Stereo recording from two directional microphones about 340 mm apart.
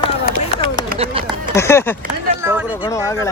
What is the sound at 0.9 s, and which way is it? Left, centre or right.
Run, centre.